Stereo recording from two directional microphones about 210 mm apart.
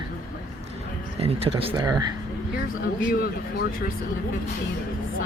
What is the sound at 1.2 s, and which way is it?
Speech, 25° right (ahead or behind).